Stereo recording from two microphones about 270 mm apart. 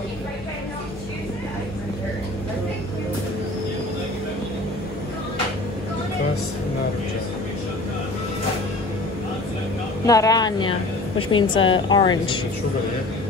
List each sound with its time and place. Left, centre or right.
10.0 s a woman's voice: centre